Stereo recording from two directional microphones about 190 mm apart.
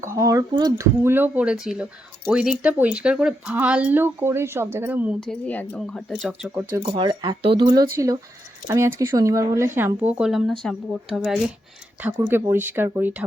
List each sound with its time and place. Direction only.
0.0 s speech: 15° right (ahead or behind)
5.2 s speech: 5° left (ahead or behind)
6.8 s speech: 25° right (ahead or behind); by 11.3 s centre (ahead or behind)
12.1 s speech: 15° right (ahead or behind)